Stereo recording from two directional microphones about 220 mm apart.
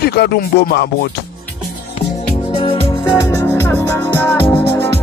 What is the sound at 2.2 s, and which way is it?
Music, 30° left (ahead or behind).